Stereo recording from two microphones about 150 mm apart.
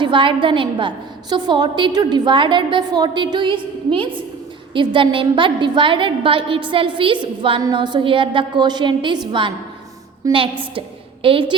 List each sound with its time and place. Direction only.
0.0 s a woman's voice: 35° right (ahead or behind)